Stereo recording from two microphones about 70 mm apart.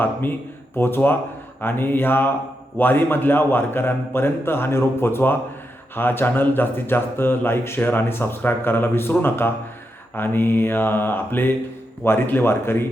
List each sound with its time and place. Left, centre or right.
0.0 s mantra: left
0.8 s speech: left
1.6 s mantra: left
2.7 s speech: left